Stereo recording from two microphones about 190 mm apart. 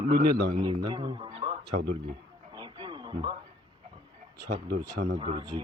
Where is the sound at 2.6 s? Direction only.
25° right (ahead or behind).